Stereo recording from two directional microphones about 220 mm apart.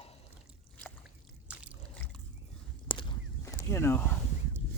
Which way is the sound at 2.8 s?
25° left (ahead or behind).